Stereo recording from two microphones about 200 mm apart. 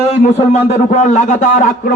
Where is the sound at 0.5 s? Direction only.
35° left (ahead or behind).